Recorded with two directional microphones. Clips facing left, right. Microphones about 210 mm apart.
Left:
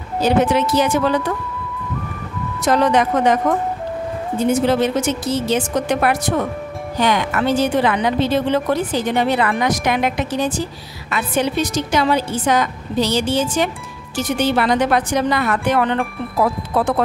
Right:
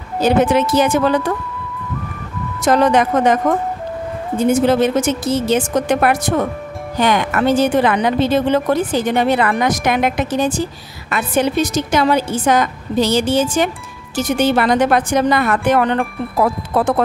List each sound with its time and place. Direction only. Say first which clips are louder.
0.2 s a woman's voice: right 2 dB; 50° right (ahead or behind)
2.6 s a woman's voice: right 2 dB; 50° right (ahead or behind)
4.5 s a woman's voice: right 3 dB; 50° right (ahead or behind)